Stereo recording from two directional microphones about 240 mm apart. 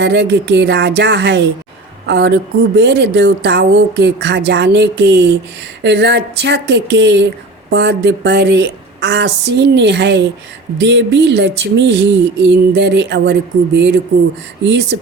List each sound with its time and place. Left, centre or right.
0.0 s a woman's voice: right